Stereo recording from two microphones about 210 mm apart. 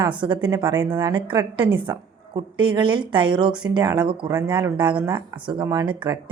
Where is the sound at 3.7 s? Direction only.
20° right (ahead or behind).